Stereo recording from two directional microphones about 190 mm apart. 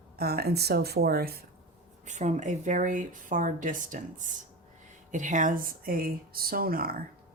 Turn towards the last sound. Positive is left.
turn(degrees=-50)  # may be behind; listen again after turning